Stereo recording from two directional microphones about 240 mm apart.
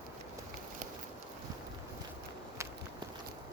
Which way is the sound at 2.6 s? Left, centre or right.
Centre.